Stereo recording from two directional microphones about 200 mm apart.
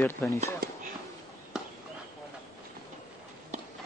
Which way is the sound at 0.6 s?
50° right (ahead or behind).